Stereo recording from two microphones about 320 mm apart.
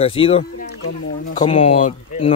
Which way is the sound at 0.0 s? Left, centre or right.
Centre.